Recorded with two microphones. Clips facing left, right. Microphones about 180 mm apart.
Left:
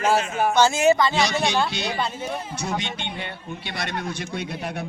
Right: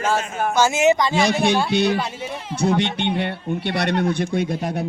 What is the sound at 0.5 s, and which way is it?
Speech, 15° right (ahead or behind).